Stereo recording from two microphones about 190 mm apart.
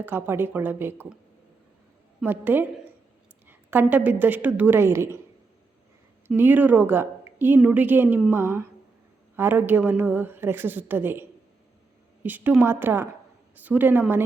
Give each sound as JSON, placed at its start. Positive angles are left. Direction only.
{"t": 0.0, "sound": "a woman's voice", "side_deg": -10}
{"t": 2.2, "sound": "a woman's voice", "side_deg": -10}
{"t": 6.2, "sound": "a woman's voice", "side_deg": -10}